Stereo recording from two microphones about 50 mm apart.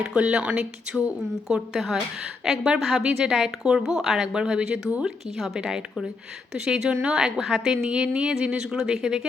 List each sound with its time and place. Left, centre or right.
0.1 s a woman's voice: centre
4.3 s speech: centre
7.9 s speech: right